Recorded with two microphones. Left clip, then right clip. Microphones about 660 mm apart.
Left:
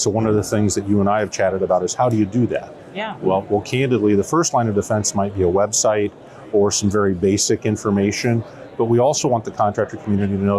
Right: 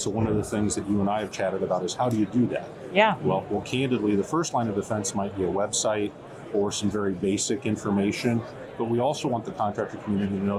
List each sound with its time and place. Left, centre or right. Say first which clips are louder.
0.0 s speech: left 9 dB; left
2.9 s speech: right 7 dB; right
3.2 s speech: left 8 dB; left